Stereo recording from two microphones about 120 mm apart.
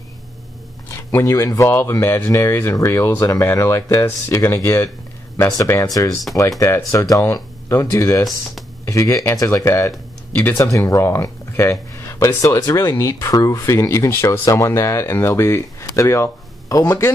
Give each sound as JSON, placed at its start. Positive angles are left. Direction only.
{"t": 0.8, "sound": "speech", "side_deg": 25}
{"t": 8.3, "sound": "speech", "side_deg": 0}
{"t": 8.8, "sound": "speech", "side_deg": 25}